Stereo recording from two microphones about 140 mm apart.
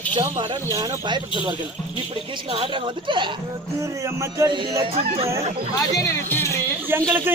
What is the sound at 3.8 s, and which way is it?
Speech, 20° right (ahead or behind).